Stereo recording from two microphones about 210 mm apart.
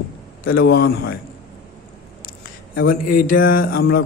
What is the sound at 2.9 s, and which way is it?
Speech, 40° left (ahead or behind).